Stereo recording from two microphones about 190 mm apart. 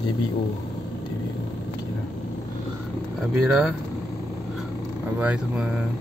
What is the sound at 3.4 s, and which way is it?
Speech, centre (ahead or behind).